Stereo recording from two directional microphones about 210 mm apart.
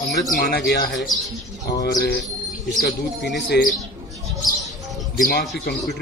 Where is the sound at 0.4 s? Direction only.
50° left (ahead or behind).